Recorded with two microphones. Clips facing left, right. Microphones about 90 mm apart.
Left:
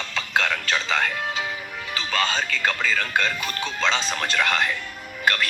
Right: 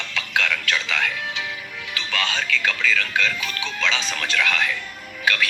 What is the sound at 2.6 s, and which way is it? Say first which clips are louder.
Speech: even; 45° left (ahead or behind).